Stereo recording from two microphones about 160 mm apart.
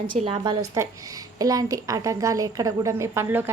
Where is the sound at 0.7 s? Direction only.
20° right (ahead or behind).